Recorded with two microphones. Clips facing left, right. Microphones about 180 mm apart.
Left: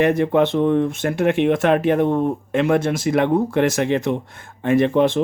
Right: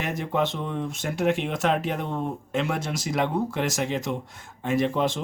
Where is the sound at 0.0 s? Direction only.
60° left (ahead or behind).